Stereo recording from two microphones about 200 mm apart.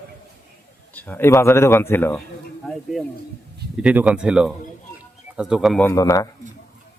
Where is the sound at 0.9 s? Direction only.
10° left (ahead or behind).